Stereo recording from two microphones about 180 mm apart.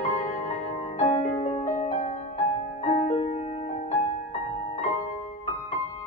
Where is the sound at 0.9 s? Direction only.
35° left (ahead or behind).